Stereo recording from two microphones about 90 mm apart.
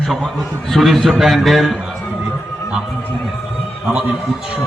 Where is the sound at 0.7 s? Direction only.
Centre (ahead or behind).